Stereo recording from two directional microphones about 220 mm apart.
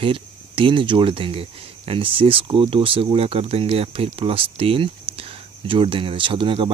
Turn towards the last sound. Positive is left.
turn(degrees=-20)  # may be behind; listen again after turning